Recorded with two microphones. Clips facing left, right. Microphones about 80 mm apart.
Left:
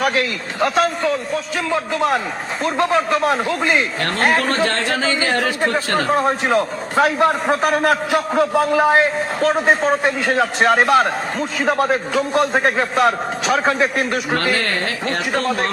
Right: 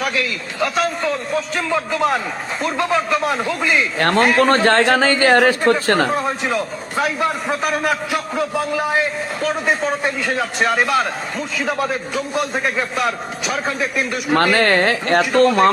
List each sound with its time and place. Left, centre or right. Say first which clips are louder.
0.0 s a man's voice: left 3 dB; left
1.3 s speech: right 1 dB; centre
2.6 s speech: left 2 dB; left
4.4 s a man's voice: right 5 dB; right
6.1 s a man's voice: left 4 dB; left
8.4 s a man's voice: left 6 dB; left
12.5 s speech: left 4 dB; left
13.0 s a man's voice: left 5 dB; left
14.3 s speech: right 8 dB; right